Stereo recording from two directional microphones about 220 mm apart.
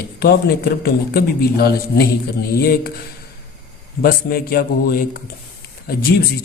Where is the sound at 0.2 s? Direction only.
45° left (ahead or behind).